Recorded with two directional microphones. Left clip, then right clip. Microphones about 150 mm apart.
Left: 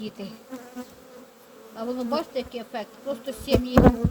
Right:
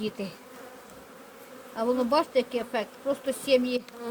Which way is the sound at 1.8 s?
30° right (ahead or behind).